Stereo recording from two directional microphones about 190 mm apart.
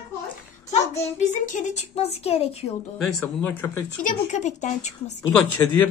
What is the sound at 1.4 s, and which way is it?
A woman's voice, 40° left (ahead or behind).